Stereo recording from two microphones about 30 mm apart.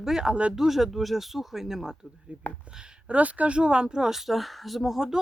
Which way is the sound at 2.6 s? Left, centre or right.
Right.